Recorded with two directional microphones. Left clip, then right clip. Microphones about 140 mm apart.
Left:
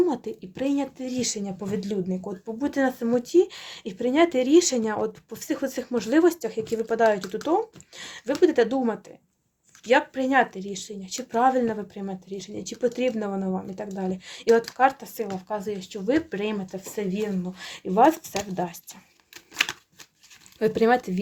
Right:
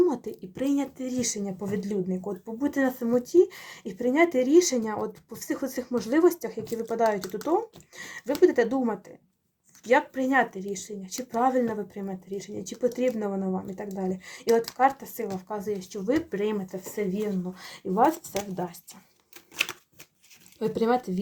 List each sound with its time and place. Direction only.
0.5 s speech: 5° left (ahead or behind); by 18.8 s 40° left (ahead or behind)
20.6 s speech: 40° left (ahead or behind)